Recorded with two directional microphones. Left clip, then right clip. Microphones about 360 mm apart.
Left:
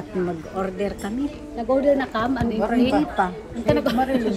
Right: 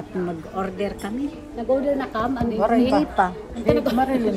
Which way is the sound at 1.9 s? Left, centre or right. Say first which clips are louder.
Left 1 dB; left.